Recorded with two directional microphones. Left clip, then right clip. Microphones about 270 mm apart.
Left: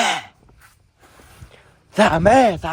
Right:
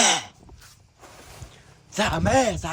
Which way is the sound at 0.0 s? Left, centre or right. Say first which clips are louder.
Left 1 dB; centre.